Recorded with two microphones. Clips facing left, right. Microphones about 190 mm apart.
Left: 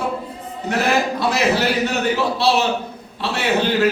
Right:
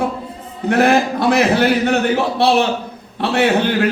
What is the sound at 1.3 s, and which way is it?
A man's voice, 55° right (ahead or behind).